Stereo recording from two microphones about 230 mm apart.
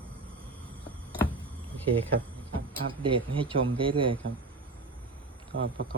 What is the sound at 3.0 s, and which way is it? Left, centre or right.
Speech, right.